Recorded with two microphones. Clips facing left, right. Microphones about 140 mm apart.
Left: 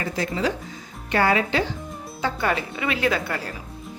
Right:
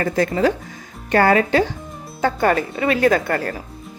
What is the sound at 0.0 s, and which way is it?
A woman's voice, 50° right (ahead or behind).